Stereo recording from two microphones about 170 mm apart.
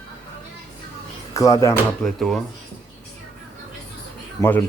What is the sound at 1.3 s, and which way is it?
Speech, 20° left (ahead or behind).